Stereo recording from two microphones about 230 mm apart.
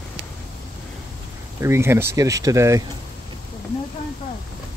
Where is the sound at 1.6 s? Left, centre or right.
Centre.